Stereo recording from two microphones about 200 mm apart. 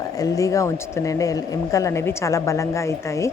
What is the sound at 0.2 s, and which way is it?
A woman's voice, 15° left (ahead or behind).